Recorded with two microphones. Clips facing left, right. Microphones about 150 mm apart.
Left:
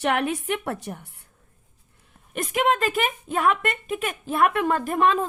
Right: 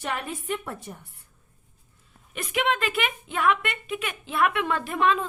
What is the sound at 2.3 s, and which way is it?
A woman's voice, 45° left (ahead or behind).